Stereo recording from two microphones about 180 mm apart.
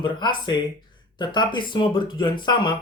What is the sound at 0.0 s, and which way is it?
Speech, 25° left (ahead or behind).